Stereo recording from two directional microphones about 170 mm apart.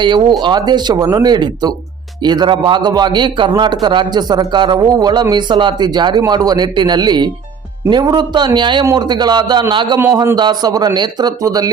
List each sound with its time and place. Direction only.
0.0 s a man's voice: 25° right (ahead or behind)